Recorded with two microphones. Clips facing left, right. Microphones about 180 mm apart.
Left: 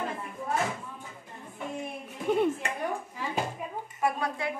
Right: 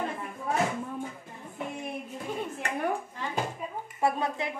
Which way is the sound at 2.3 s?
70° left (ahead or behind).